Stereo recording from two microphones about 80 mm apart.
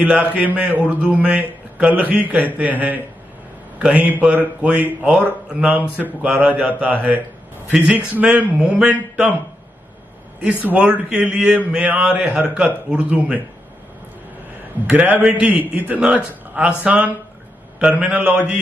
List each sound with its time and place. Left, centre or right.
0.0 s a man's voice: centre
10.6 s a man's voice: centre
14.9 s a man's voice: centre